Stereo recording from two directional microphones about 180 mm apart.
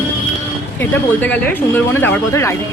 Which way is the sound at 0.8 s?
10° left (ahead or behind).